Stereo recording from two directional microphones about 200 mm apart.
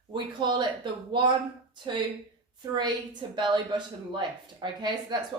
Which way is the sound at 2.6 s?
20° right (ahead or behind).